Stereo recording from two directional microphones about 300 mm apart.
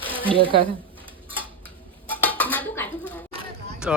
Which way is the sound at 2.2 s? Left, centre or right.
Centre.